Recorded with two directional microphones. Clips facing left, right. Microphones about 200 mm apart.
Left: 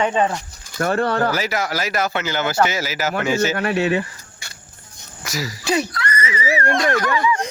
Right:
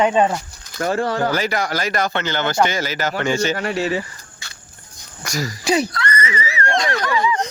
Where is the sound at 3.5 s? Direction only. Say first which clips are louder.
Left 2 dB; 60° left (ahead or behind).